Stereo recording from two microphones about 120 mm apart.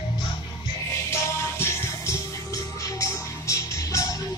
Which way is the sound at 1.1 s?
20° left (ahead or behind).